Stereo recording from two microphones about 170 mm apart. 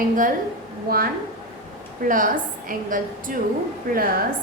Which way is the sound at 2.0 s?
50° right (ahead or behind).